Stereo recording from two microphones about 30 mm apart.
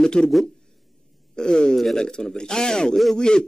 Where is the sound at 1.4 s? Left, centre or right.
Left.